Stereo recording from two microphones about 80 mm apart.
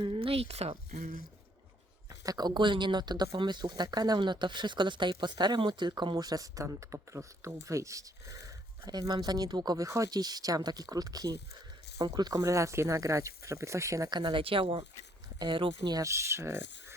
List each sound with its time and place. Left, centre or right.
2.0 s speech: right
5.9 s speech: right
8.9 s speech: right
12.4 s speech: right
14.1 s speech: right
16.0 s speech: right